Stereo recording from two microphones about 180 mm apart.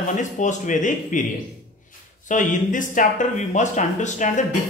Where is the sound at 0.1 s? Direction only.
45° left (ahead or behind).